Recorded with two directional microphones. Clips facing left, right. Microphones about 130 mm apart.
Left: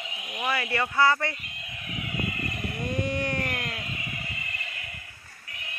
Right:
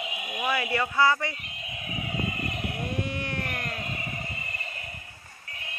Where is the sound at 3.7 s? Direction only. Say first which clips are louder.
Right 2 dB; 40° right (ahead or behind).